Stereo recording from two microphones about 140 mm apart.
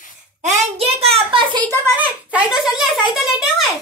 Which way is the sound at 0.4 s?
50° right (ahead or behind).